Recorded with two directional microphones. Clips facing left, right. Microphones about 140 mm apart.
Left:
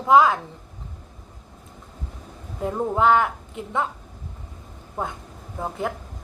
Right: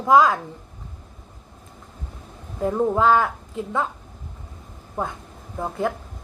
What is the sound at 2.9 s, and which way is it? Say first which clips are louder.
Speech: left 1 dB; 20° left (ahead or behind).